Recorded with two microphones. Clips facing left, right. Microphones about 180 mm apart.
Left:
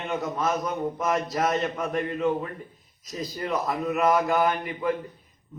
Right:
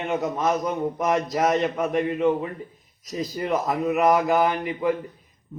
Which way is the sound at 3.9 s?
20° right (ahead or behind).